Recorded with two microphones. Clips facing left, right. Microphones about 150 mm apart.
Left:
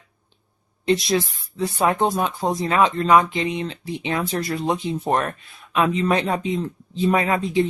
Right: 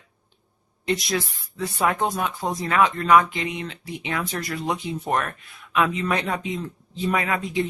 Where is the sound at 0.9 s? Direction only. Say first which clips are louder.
Left 5 dB; 30° left (ahead or behind).